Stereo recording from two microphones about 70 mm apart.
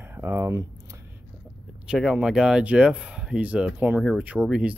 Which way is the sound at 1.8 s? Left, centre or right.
Centre.